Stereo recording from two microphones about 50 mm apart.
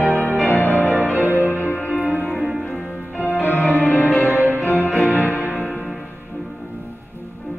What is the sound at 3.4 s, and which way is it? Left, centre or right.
Music, left.